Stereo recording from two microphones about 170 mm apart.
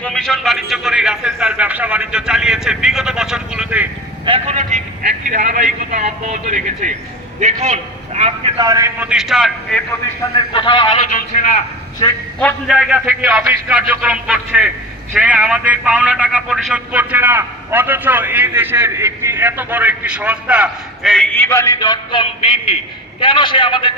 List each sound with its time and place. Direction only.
0.0 s a man's voice: 5° left (ahead or behind)
4.3 s a man's voice: 35° right (ahead or behind)
8.5 s a man's voice: 20° right (ahead or behind)
9.0 s a man's voice: 5° right (ahead or behind)
10.3 s a man's voice: 30° left (ahead or behind)
12.0 s a man's voice: 30° left (ahead or behind)
12.4 s a man's voice: 5° left (ahead or behind)
12.7 s a man's voice: 5° right (ahead or behind); by 23.9 s 30° left (ahead or behind)